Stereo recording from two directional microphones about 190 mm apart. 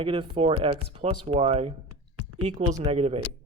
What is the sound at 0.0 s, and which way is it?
Speech, 30° right (ahead or behind).